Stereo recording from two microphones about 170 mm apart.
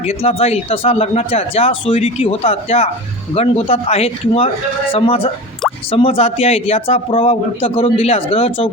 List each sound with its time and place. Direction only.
0.0 s speech: 35° left (ahead or behind)